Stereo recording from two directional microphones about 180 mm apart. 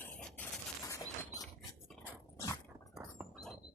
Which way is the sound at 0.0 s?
5° left (ahead or behind).